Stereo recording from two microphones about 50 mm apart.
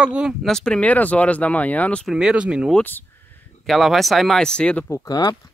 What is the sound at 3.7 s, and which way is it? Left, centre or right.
Speech, centre.